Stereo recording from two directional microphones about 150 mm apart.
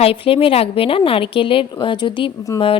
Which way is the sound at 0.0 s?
40° left (ahead or behind).